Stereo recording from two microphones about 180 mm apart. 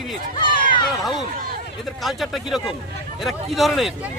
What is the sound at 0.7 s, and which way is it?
Speech, 25° left (ahead or behind).